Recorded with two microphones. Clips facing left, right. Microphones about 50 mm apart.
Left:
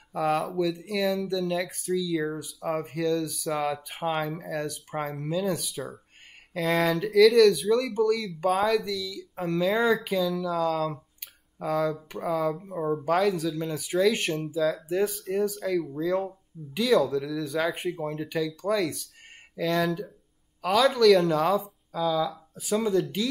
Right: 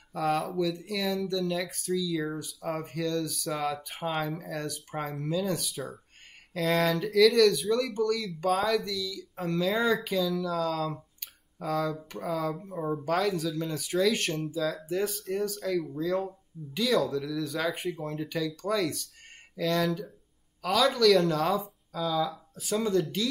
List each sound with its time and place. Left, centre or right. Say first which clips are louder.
0.1 s speech: left 2 dB; centre
15.8 s speech: left 3 dB; centre
16.1 s speech: left 2 dB; centre